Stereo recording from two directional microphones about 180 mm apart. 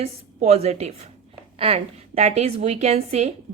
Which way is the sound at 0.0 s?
35° right (ahead or behind).